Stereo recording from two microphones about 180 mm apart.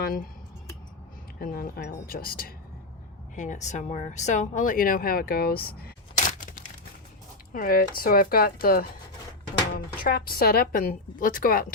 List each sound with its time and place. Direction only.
0.0 s speech: 55° left (ahead or behind)
1.4 s speech: 55° left (ahead or behind)
3.3 s speech: 45° left (ahead or behind)